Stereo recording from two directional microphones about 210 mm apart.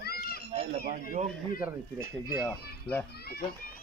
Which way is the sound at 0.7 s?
40° right (ahead or behind).